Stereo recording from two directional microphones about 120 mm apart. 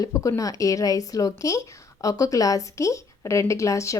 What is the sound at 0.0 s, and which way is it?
Speech, 25° left (ahead or behind).